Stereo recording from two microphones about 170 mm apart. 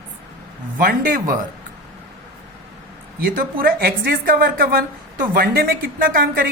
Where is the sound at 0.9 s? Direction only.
60° right (ahead or behind).